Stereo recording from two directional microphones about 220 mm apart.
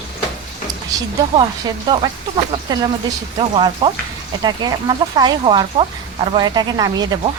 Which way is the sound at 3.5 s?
25° right (ahead or behind).